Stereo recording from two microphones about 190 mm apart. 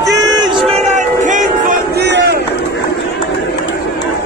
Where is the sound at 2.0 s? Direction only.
60° right (ahead or behind).